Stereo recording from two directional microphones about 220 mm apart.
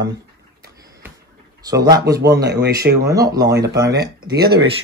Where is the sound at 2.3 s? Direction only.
50° right (ahead or behind).